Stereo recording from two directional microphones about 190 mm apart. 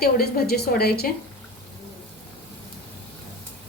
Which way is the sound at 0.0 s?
55° left (ahead or behind).